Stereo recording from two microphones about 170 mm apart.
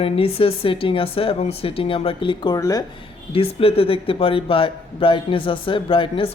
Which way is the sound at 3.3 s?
35° left (ahead or behind).